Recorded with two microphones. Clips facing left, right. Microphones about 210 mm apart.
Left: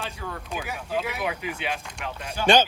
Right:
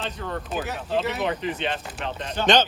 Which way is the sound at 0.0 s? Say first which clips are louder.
Right 4 dB; 5° left (ahead or behind).